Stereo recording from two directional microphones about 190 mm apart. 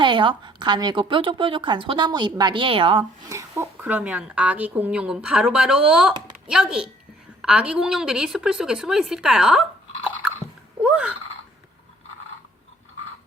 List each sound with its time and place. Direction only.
0.0 s a woman's voice: 25° right (ahead or behind)
3.2 s a woman's voice: 15° right (ahead or behind)